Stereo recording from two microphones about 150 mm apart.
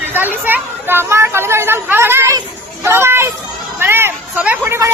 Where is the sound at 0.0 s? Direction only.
15° right (ahead or behind).